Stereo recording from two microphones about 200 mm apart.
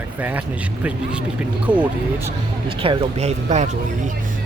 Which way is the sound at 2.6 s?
25° right (ahead or behind).